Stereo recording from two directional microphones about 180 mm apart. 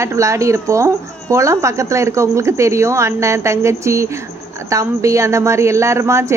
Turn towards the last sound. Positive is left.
turn(degrees=-15)  # may be behind; listen again after turning